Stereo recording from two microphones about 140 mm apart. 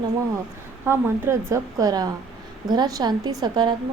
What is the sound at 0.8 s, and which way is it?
A woman's voice, 15° right (ahead or behind).